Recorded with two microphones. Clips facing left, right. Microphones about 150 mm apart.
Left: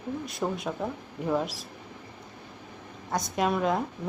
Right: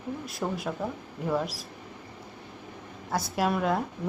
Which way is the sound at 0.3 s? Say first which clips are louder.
Even; centre (ahead or behind).